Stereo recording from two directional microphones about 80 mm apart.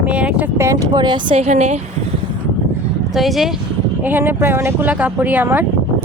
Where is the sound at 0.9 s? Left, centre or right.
Right.